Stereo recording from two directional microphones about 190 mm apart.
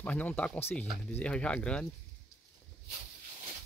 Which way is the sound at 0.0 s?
10° left (ahead or behind).